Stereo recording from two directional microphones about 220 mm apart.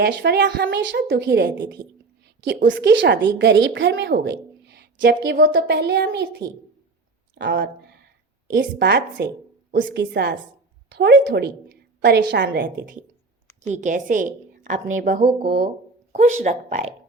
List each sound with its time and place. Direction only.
0.0 s a woman's voice: 50° right (ahead or behind)
13.6 s a woman's voice: 35° right (ahead or behind)